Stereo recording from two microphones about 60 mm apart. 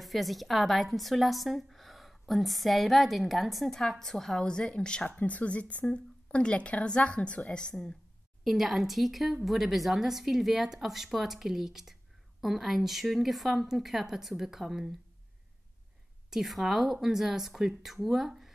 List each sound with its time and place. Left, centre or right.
0.0 s a woman's voice: centre
8.5 s a woman's voice: centre
16.3 s a woman's voice: centre